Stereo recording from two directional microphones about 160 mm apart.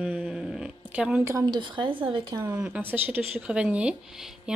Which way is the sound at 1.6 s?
30° right (ahead or behind).